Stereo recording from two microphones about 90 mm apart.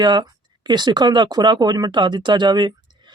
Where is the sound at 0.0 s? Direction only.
55° right (ahead or behind).